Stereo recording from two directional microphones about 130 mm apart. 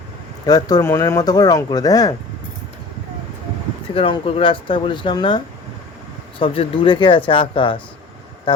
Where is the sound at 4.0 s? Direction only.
45° left (ahead or behind).